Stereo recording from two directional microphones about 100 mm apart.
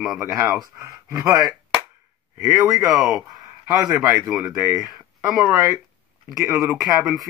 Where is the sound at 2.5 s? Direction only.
Centre (ahead or behind).